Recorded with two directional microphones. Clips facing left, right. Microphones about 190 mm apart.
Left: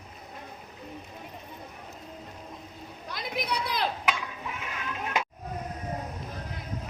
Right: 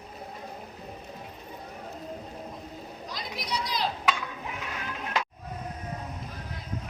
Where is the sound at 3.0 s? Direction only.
55° left (ahead or behind).